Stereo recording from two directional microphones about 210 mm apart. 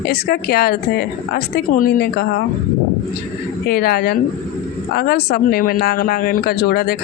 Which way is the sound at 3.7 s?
45° left (ahead or behind).